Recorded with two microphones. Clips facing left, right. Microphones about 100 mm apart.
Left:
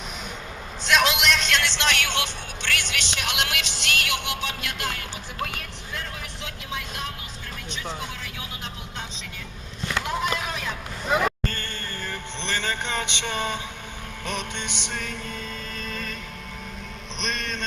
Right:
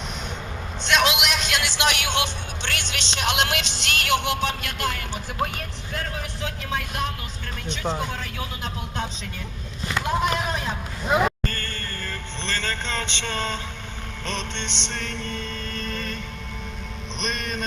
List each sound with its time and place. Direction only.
0.9 s speech: centre (ahead or behind); by 4.9 s 45° right (ahead or behind)
6.7 s speech: 55° right (ahead or behind)
7.4 s music: 60° right (ahead or behind)
7.9 s speech: 50° right (ahead or behind)
10.1 s speech: 40° right (ahead or behind)
11.5 s music: 20° left (ahead or behind)
17.2 s vehicle: centre (ahead or behind)